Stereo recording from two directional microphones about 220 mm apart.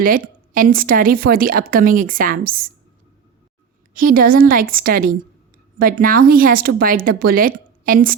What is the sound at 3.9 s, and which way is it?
Speech, 40° right (ahead or behind).